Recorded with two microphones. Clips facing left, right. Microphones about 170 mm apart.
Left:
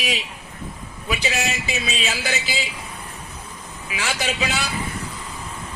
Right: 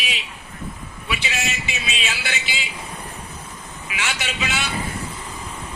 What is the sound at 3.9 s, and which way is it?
Speech, 35° left (ahead or behind).